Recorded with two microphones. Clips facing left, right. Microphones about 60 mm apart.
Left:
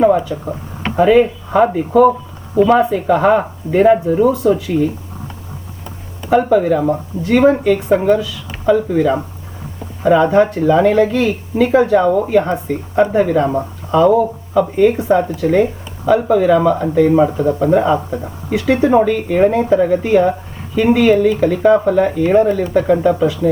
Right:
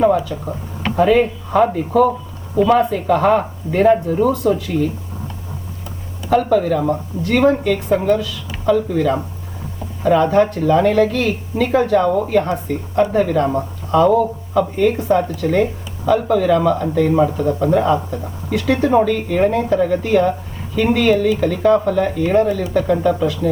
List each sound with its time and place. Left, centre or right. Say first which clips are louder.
0.4 s speech: left 1 dB; centre
6.3 s speech: left 3 dB; left
15.6 s speech: left 2 dB; centre